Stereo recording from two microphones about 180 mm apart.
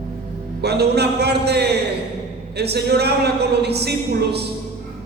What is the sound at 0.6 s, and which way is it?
Speech, 65° right (ahead or behind).